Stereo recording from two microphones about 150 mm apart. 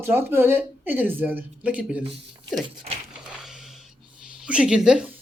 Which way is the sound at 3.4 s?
Centre (ahead or behind).